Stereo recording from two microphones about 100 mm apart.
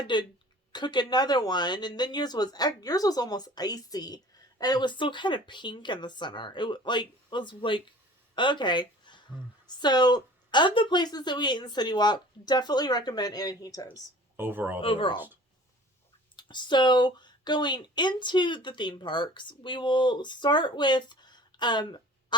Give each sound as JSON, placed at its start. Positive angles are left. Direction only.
{"t": 0.1, "sound": "speech", "side_deg": 50}
{"t": 14.3, "sound": "speech", "side_deg": -20}
{"t": 14.8, "sound": "speech", "side_deg": 60}
{"t": 16.3, "sound": "speech", "side_deg": 50}